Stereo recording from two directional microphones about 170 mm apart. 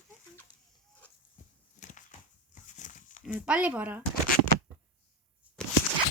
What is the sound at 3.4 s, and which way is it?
Speech, 10° right (ahead or behind).